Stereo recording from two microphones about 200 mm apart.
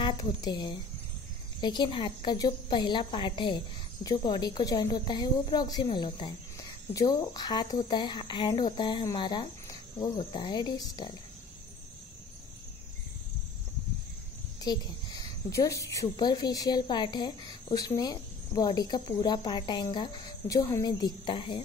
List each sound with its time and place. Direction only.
0.0 s a woman's voice: 20° left (ahead or behind)
14.6 s a woman's voice: 20° left (ahead or behind)